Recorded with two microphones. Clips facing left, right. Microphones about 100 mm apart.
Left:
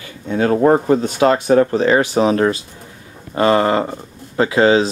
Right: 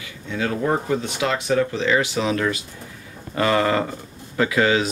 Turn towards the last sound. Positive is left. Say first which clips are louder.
# left 6 dB
turn(degrees=30)  # may be behind; listen again after turning